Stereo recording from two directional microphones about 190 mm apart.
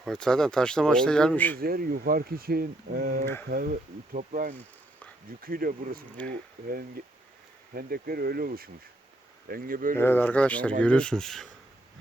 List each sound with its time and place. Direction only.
0.0 s speech: 5° left (ahead or behind)
1.5 s speech: 50° right (ahead or behind)
9.9 s speech: 10° left (ahead or behind)